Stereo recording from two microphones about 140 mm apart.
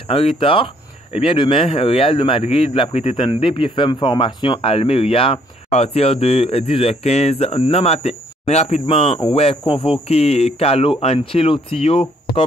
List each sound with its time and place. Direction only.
0.4 s a man's voice: 40° left (ahead or behind)